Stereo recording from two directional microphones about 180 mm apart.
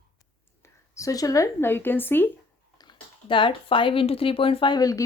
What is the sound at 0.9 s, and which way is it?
Speech, 20° left (ahead or behind).